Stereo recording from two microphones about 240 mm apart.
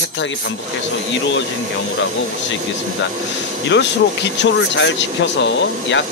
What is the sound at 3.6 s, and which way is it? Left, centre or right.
A man's voice, left.